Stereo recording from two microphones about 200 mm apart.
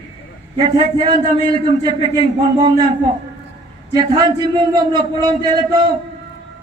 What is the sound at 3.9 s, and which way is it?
A man's voice, 20° right (ahead or behind).